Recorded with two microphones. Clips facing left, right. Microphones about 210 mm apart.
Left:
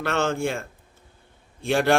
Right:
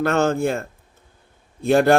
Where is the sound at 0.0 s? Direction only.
40° right (ahead or behind).